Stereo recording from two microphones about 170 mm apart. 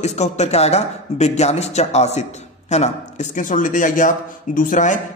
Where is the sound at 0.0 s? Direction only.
40° left (ahead or behind).